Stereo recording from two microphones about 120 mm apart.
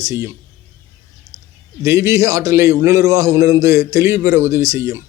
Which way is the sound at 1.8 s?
25° right (ahead or behind).